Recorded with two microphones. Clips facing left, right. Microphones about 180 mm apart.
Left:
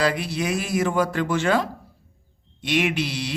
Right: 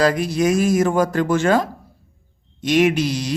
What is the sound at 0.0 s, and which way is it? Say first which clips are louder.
A man's voice: right 6 dB; 45° right (ahead or behind).